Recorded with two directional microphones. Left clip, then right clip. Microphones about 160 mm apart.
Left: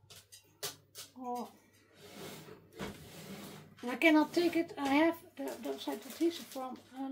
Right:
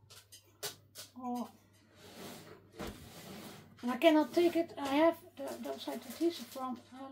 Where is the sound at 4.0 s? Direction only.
25° left (ahead or behind).